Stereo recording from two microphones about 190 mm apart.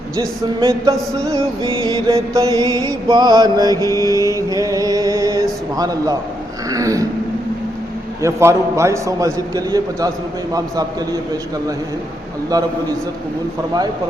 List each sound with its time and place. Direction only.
0.2 s music: 15° right (ahead or behind)
2.1 s mantra: 15° right (ahead or behind)
6.7 s a sound: 15° right (ahead or behind)
8.2 s music: 15° right (ahead or behind)
10.5 s mantra: 20° right (ahead or behind)